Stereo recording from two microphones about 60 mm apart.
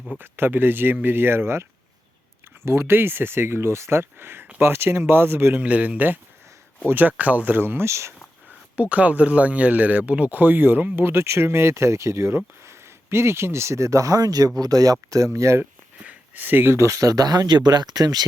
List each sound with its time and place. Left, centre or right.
0.2 s speech: right
2.6 s speech: right
5.5 s speech: right
8.7 s speech: right
15.3 s speech: right
16.0 s a sound: right
16.7 s speech: right